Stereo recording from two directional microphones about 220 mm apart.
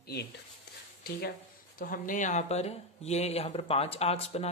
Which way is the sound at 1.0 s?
45° left (ahead or behind).